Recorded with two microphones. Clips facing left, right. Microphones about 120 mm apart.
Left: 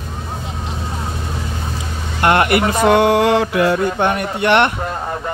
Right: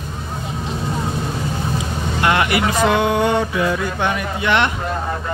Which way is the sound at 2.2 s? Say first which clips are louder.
Left 4 dB; 50° left (ahead or behind).